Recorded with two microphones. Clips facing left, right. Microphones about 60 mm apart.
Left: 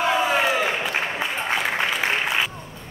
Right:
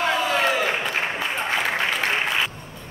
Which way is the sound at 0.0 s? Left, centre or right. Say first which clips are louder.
Left 1 dB; left.